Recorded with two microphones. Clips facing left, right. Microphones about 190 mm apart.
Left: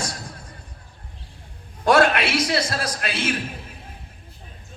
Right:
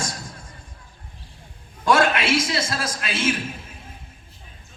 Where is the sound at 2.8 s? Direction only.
60° left (ahead or behind).